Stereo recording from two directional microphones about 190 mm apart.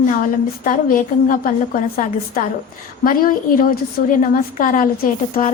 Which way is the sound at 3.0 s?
45° left (ahead or behind).